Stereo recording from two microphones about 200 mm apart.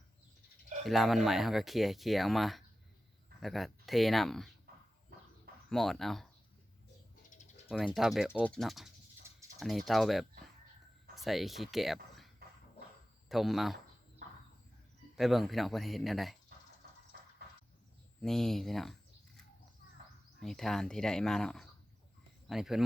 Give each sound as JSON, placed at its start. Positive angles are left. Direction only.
{"t": 0.9, "sound": "speech", "side_deg": 0}
{"t": 5.6, "sound": "speech", "side_deg": 0}
{"t": 7.3, "sound": "bird", "side_deg": 35}
{"t": 7.7, "sound": "speech", "side_deg": 0}
{"t": 9.2, "sound": "typing", "side_deg": -10}
{"t": 9.6, "sound": "speech", "side_deg": 0}
{"t": 13.2, "sound": "speech", "side_deg": 0}
{"t": 15.1, "sound": "speech", "side_deg": 0}
{"t": 16.8, "sound": "a sound", "side_deg": -50}
{"t": 18.2, "sound": "speech", "side_deg": 0}
{"t": 20.4, "sound": "speech", "side_deg": 0}